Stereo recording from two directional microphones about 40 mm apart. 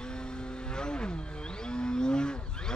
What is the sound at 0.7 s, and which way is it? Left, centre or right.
Vehicle, left.